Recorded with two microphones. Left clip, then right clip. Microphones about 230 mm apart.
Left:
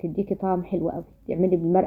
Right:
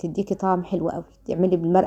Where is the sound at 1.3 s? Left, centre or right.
Right.